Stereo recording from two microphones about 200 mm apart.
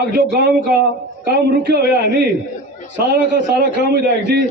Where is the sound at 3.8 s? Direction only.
55° right (ahead or behind).